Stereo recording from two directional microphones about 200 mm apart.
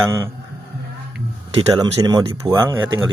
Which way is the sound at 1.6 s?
25° right (ahead or behind).